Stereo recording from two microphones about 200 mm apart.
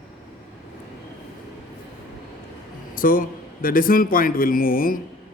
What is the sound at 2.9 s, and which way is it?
A man's voice, 45° left (ahead or behind).